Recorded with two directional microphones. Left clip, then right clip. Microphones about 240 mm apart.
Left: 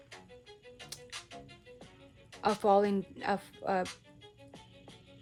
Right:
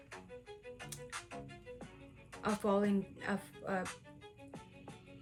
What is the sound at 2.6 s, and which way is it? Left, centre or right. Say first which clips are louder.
Speech: left 8 dB; centre.